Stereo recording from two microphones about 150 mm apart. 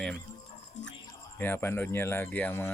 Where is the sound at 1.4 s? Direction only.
15° left (ahead or behind).